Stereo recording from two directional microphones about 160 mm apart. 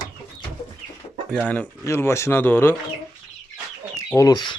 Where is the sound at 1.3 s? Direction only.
5° left (ahead or behind).